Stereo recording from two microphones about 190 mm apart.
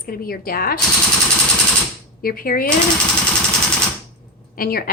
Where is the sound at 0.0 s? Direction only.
50° left (ahead or behind).